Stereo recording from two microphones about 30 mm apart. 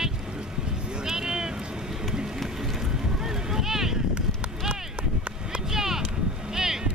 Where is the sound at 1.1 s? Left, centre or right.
Centre.